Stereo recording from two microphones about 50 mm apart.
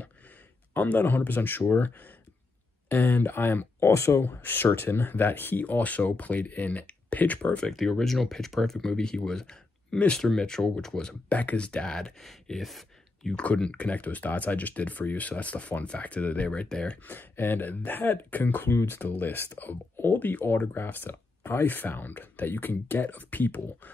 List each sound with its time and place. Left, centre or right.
0.7 s speech: left
3.8 s speech: left
4.1 s speech: left
7.7 s speech: centre
11.3 s speech: left
12.2 s speech: centre
13.6 s speech: left
17.0 s speech: left
18.7 s speech: left
18.9 s speech: left